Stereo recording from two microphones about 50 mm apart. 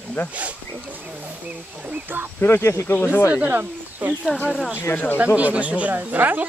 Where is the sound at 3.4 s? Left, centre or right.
Right.